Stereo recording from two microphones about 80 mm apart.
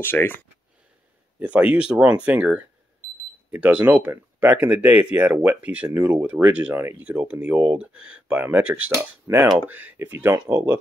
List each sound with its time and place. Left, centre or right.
0.0 s speech: left
1.4 s speech: centre
8.9 s speech: right
9.7 s speech: right